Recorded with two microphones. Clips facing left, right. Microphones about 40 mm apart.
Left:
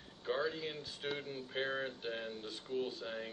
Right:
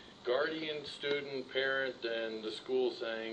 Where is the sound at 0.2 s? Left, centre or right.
Right.